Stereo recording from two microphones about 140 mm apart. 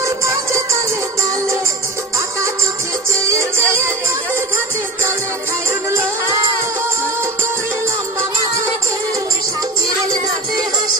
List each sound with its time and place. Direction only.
0.0 s music: 20° right (ahead or behind)
3.3 s music: 20° right (ahead or behind)